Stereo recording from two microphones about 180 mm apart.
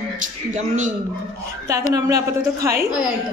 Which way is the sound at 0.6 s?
40° right (ahead or behind).